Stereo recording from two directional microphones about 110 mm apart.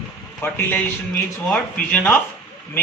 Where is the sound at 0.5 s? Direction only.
20° left (ahead or behind).